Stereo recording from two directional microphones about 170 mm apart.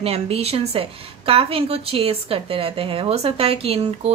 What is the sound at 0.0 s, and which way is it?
A woman's voice, 35° right (ahead or behind).